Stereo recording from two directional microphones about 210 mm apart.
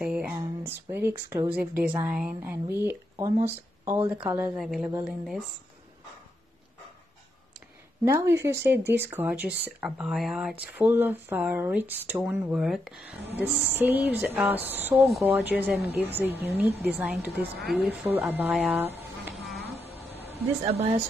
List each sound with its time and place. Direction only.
0.0 s a woman's voice: 5° right (ahead or behind)
8.0 s speech: 15° right (ahead or behind)
19.8 s a sound: 30° right (ahead or behind)